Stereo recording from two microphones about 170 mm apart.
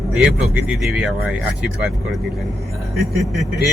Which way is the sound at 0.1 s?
5° right (ahead or behind).